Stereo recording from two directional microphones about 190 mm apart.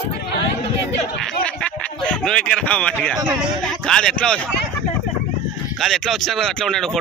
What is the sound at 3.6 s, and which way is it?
Speech, 5° left (ahead or behind).